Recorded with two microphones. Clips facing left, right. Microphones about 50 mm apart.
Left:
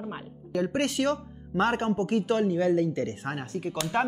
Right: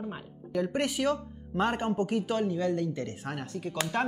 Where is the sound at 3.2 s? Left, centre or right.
Left.